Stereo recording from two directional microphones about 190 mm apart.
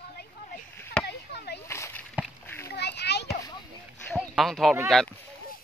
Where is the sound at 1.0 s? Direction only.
60° left (ahead or behind).